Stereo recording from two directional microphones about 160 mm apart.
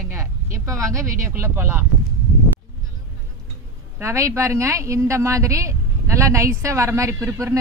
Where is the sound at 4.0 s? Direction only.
20° right (ahead or behind).